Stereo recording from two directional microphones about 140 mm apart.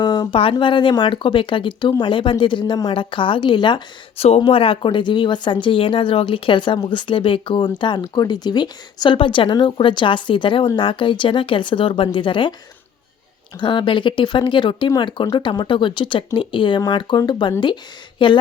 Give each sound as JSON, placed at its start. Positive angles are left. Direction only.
{"t": 0.0, "sound": "a sound", "side_deg": 30}
{"t": 0.5, "sound": "speech", "side_deg": 35}
{"t": 13.6, "sound": "speech", "side_deg": 35}